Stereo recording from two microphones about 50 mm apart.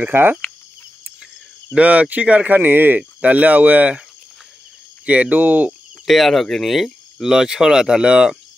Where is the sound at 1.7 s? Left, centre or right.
Right.